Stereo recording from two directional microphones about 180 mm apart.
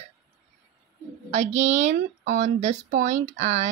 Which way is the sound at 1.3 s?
40° right (ahead or behind).